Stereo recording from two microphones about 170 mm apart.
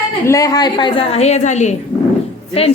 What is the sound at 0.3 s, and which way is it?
A woman's voice, 20° left (ahead or behind).